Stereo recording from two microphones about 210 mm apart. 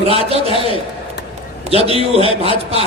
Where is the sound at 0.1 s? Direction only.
30° right (ahead or behind).